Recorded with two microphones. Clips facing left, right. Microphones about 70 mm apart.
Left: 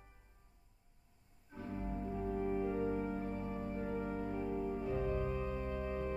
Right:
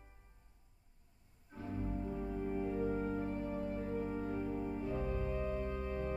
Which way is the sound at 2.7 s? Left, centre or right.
Centre.